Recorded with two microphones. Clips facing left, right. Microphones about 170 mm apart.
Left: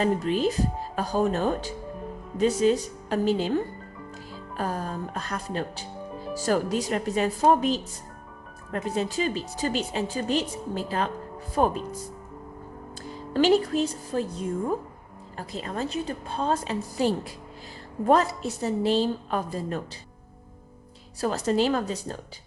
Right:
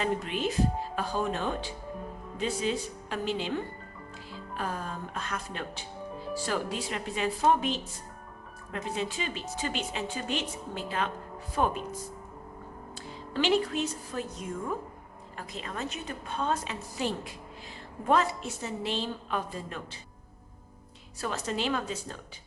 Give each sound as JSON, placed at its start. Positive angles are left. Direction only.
{"t": 0.0, "sound": "a woman's voice", "side_deg": 35}
{"t": 13.3, "sound": "a woman's voice", "side_deg": 40}
{"t": 21.2, "sound": "a woman's voice", "side_deg": 35}